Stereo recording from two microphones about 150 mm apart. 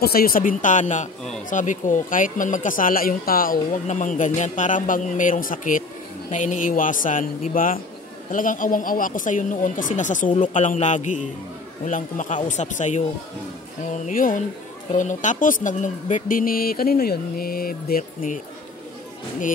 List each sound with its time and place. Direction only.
0.0 s speech: 80° left; by 13.0 s 55° left (ahead or behind)
14.0 s speech: 60° left (ahead or behind)